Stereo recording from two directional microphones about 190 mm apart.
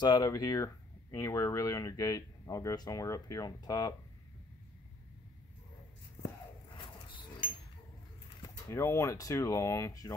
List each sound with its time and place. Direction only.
0.0 s speech: 20° left (ahead or behind)
8.6 s speech: 15° left (ahead or behind)